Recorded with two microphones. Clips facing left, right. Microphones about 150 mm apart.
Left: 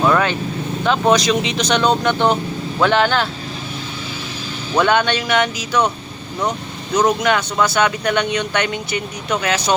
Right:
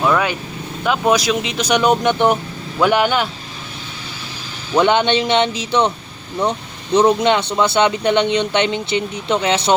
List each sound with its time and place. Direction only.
0.0 s speech: 5° right (ahead or behind)
4.8 s speech: 20° right (ahead or behind)
6.9 s speech: 25° right (ahead or behind)